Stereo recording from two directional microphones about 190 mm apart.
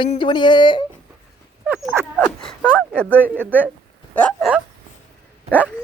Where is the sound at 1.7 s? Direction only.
10° right (ahead or behind).